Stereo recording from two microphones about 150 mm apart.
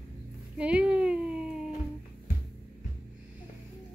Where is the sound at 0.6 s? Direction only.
5° right (ahead or behind).